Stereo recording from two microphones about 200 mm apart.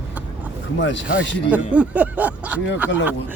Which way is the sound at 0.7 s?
65° left (ahead or behind).